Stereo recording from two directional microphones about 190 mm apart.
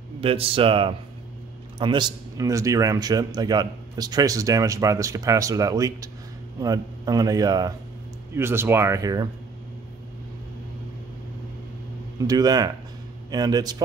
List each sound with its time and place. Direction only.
0.2 s a man's voice: 30° right (ahead or behind)
12.3 s a man's voice: 20° right (ahead or behind)